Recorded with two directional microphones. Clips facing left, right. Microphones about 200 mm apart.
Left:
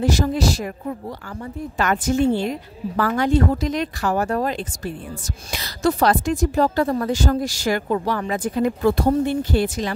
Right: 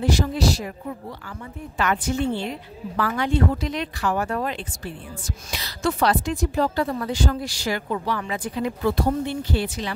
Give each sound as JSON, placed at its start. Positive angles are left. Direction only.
{"t": 0.0, "sound": "a woman's voice", "side_deg": 45}
{"t": 1.8, "sound": "a woman's voice", "side_deg": 45}